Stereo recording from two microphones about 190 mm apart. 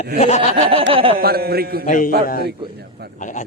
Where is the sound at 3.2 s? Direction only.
40° left (ahead or behind).